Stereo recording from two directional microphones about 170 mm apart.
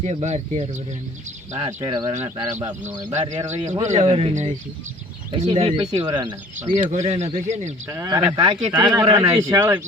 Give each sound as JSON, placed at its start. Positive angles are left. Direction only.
{"t": 0.0, "sound": "speech", "side_deg": -40}
{"t": 2.8, "sound": "a man's voice", "side_deg": -45}
{"t": 6.7, "sound": "speech", "side_deg": -40}
{"t": 7.9, "sound": "a man's voice", "side_deg": -20}